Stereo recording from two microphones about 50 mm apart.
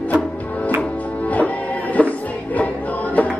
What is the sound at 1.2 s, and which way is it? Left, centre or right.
Music, left.